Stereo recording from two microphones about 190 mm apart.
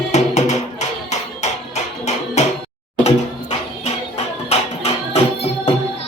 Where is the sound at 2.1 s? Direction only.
35° left (ahead or behind).